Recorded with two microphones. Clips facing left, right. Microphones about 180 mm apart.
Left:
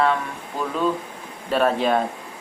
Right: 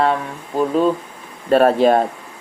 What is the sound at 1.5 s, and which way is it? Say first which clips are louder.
Speech: right 7 dB; 45° right (ahead or behind).